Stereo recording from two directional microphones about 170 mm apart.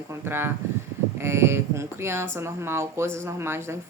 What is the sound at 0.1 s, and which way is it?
Speech, 15° right (ahead or behind).